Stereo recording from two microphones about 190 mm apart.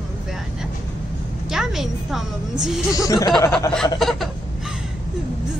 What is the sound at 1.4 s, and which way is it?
A woman's voice, centre (ahead or behind).